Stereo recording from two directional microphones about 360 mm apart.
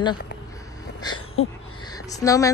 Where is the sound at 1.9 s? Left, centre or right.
Centre.